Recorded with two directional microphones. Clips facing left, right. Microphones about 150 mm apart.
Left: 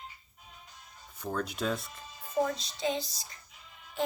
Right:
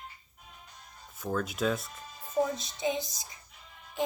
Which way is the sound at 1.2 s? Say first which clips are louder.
Right 2 dB; centre (ahead or behind).